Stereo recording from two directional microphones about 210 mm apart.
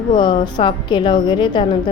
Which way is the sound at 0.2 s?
20° left (ahead or behind).